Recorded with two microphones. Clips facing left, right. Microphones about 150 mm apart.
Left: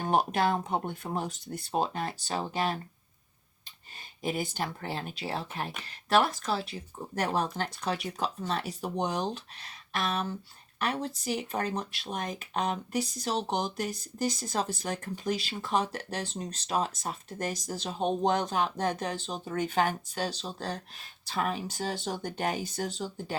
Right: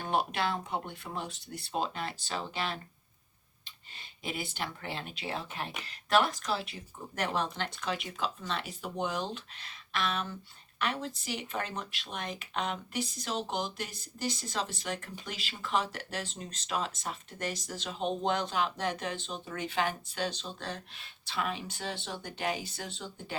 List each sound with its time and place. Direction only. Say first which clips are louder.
0.0 s speech: left 5 dB; 45° left (ahead or behind)
4.2 s speech: left 5 dB; 40° left (ahead or behind)